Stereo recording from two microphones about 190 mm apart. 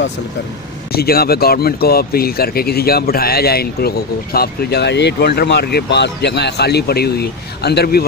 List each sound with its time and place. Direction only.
0.9 s speech: 55° left (ahead or behind)